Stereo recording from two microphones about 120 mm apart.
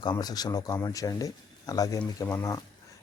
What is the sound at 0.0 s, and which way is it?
Speech, 35° left (ahead or behind).